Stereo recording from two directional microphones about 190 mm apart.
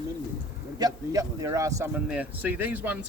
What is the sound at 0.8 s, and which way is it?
Speech, 15° right (ahead or behind).